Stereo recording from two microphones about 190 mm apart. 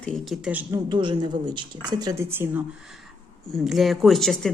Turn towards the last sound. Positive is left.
turn(degrees=0)  # may be behind; listen again after turning